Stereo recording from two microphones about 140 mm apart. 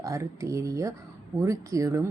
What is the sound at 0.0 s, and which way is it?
Speech, 20° right (ahead or behind).